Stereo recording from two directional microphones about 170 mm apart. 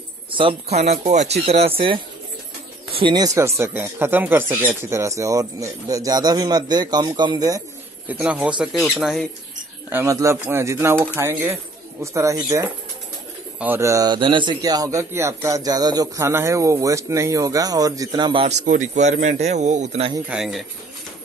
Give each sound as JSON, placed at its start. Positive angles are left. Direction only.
{"t": 0.3, "sound": "speech", "side_deg": -30}
{"t": 3.0, "sound": "speech", "side_deg": -25}
{"t": 3.3, "sound": "speech", "side_deg": -15}
{"t": 8.1, "sound": "speech", "side_deg": -10}
{"t": 18.7, "sound": "speech", "side_deg": -45}
{"t": 20.2, "sound": "a man's voice", "side_deg": -5}